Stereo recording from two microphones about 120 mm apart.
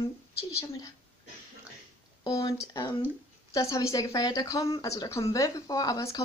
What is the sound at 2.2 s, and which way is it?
Speech, 35° left (ahead or behind).